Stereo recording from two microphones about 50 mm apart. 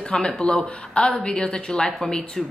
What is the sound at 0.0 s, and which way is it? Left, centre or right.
A woman's voice, centre.